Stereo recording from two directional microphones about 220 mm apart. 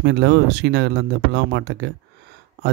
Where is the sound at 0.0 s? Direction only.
50° right (ahead or behind).